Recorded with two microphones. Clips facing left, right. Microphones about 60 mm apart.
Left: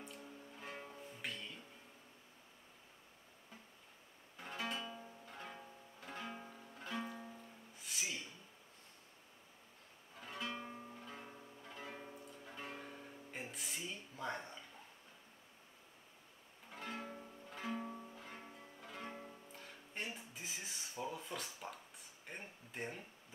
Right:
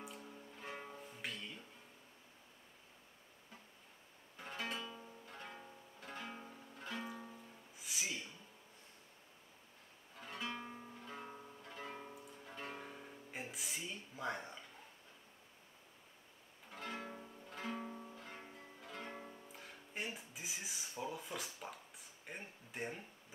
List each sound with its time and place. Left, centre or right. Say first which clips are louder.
0.0 s music: right 1 dB; centre
4.4 s guitar: left 1 dB; centre
4.7 s music: left 1 dB; centre
10.2 s music: even; centre
16.7 s music: even; centre
21.0 s a sound: even; centre